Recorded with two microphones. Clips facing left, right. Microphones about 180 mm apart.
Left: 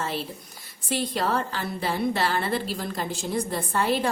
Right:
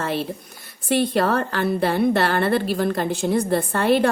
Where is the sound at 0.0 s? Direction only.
60° right (ahead or behind).